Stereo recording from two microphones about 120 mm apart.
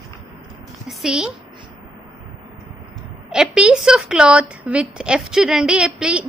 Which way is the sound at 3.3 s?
5° right (ahead or behind).